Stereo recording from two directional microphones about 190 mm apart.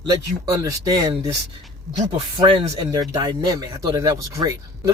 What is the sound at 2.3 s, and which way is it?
Speech, 25° right (ahead or behind).